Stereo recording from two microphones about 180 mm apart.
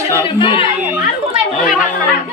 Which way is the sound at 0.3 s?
30° left (ahead or behind).